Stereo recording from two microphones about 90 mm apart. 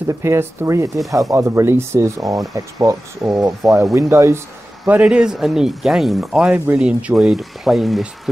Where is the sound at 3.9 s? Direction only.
30° right (ahead or behind).